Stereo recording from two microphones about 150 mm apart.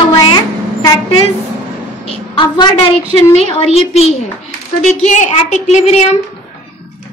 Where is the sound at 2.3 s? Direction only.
30° left (ahead or behind).